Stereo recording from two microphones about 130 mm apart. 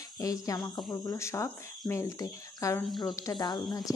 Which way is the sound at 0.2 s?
25° left (ahead or behind).